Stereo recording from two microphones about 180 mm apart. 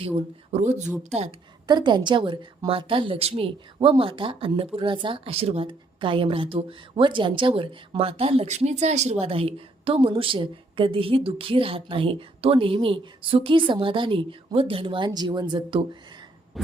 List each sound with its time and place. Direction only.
0.0 s speech: 35° right (ahead or behind)
1.6 s a woman's voice: 25° right (ahead or behind)